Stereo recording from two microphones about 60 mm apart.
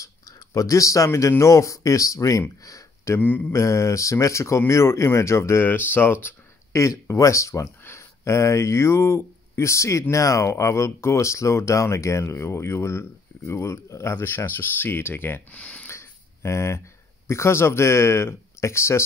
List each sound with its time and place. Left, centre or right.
0.0 s speech: left
2.6 s a sound: left
3.2 s mantra: left
3.5 s speech: left
5.7 s speech: left
6.7 s speech: left
7.8 s speech: left
14.1 s speech: left
15.5 s speech: left
15.9 s a sound: left
17.3 s speech: left